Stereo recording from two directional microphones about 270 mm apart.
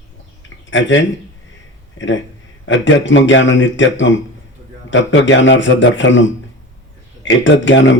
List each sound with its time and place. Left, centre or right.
0.7 s a man's voice: left